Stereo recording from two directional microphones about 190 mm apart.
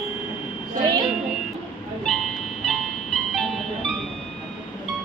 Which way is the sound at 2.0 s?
Centre (ahead or behind).